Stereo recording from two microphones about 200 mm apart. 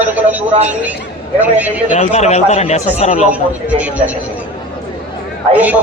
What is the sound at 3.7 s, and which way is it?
Speech, 5° right (ahead or behind).